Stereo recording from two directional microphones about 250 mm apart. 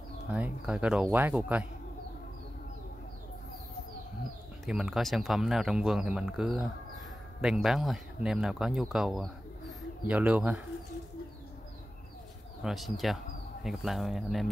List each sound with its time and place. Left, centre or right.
0.3 s speech: centre
4.6 s speech: centre
12.6 s speech: centre